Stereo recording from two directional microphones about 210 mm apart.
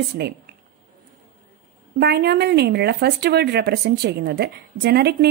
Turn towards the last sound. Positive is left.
turn(degrees=-50)  # may be behind; listen again after turning